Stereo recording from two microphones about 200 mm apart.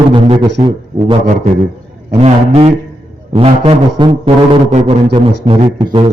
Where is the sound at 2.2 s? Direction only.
30° right (ahead or behind).